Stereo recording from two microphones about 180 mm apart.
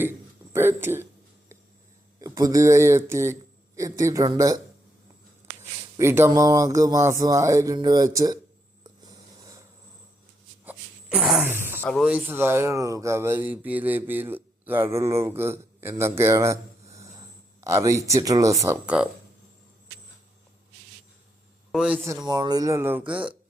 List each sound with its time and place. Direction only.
0.5 s speech: 10° right (ahead or behind)
2.2 s speech: 20° right (ahead or behind)
6.0 s speech: 15° right (ahead or behind)
8.8 s a sound: 20° right (ahead or behind)
10.7 s a sound: 5° right (ahead or behind)
11.8 s speech: 5° left (ahead or behind)
12.0 s speech: 10° right (ahead or behind)
17.6 s speech: 15° right (ahead or behind)
21.7 s speech: 5° right (ahead or behind)